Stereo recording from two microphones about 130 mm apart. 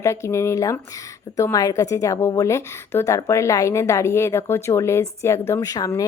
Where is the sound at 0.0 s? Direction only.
20° left (ahead or behind).